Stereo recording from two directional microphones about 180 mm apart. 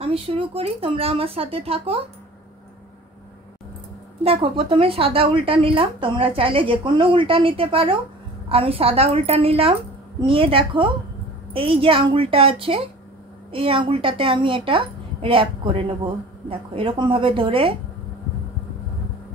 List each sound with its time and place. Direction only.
0.0 s speech: 35° right (ahead or behind)
4.2 s a woman's voice: 35° right (ahead or behind)